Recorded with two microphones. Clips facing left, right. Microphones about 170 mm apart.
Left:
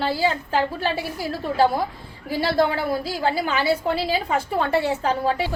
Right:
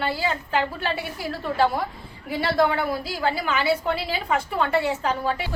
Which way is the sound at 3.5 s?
35° left (ahead or behind).